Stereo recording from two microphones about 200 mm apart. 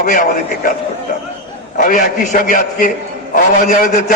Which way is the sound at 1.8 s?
45° left (ahead or behind).